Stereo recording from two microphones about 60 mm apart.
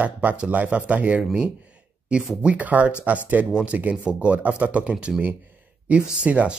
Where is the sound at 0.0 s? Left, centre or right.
Right.